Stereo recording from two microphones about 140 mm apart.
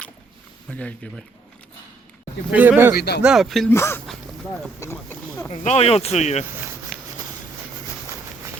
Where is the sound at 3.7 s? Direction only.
15° left (ahead or behind).